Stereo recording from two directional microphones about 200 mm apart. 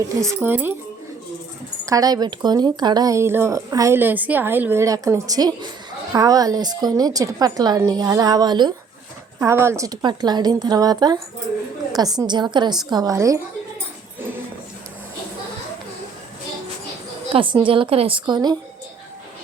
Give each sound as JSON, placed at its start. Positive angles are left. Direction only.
{"t": 0.2, "sound": "speech", "side_deg": -15}
{"t": 1.8, "sound": "a woman's voice", "side_deg": -15}
{"t": 17.3, "sound": "a woman's voice", "side_deg": -25}